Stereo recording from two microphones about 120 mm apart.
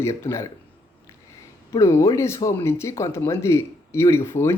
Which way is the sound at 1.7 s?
25° left (ahead or behind).